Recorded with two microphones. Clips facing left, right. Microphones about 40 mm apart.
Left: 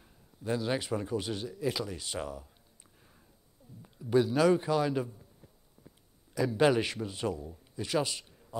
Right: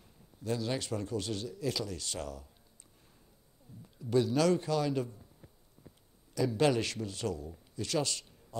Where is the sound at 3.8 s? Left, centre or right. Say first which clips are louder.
Left 2 dB; centre.